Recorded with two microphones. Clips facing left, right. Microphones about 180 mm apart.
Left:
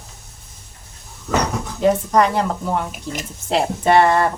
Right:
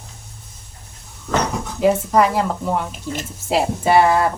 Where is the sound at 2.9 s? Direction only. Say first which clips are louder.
Right 1 dB; 10° left (ahead or behind).